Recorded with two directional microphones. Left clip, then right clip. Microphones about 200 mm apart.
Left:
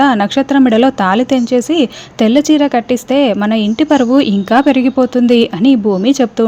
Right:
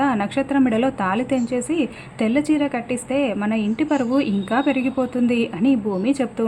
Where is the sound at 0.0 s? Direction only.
35° left (ahead or behind).